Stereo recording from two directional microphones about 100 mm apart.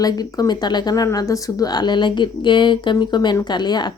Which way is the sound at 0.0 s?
40° left (ahead or behind).